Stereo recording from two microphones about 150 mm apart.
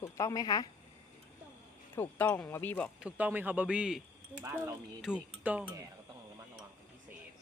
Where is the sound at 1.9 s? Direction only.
10° left (ahead or behind).